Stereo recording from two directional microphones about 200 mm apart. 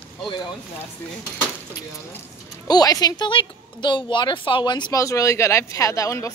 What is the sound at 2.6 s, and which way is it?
Speech, 20° left (ahead or behind).